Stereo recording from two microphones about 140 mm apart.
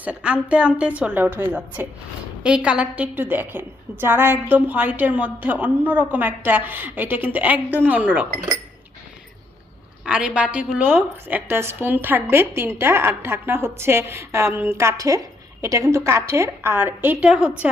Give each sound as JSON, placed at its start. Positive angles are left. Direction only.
{"t": 0.0, "sound": "a woman's voice", "side_deg": -10}
{"t": 10.1, "sound": "a woman's voice", "side_deg": -5}